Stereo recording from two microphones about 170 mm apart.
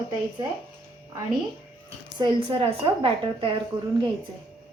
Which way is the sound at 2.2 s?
30° right (ahead or behind).